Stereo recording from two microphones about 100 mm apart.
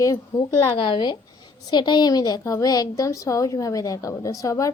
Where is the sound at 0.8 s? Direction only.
50° left (ahead or behind).